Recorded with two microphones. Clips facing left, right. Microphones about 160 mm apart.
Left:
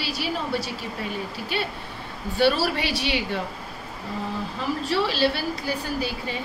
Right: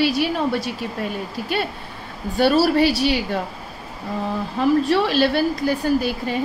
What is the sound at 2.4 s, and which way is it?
A woman's voice, 40° right (ahead or behind).